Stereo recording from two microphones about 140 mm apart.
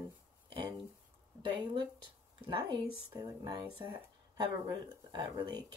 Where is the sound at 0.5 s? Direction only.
35° right (ahead or behind).